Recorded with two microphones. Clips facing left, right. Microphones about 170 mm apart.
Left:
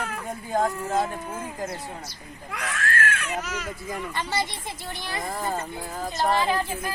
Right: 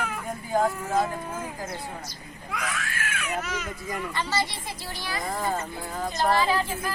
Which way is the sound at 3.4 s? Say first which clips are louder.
Even; centre (ahead or behind).